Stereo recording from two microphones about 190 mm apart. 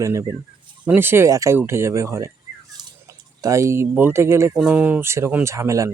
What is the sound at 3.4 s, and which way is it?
Speech, 15° right (ahead or behind).